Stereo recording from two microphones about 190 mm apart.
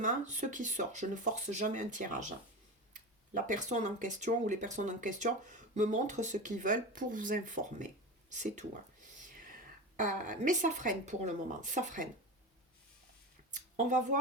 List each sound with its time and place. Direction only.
0.0 s speech: 40° right (ahead or behind)
9.3 s whispering: 45° right (ahead or behind)
10.0 s speech: 40° right (ahead or behind)
13.5 s speech: 40° right (ahead or behind)